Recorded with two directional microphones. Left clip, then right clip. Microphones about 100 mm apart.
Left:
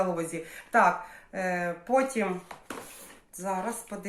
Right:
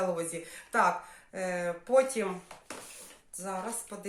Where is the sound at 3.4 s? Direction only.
15° right (ahead or behind).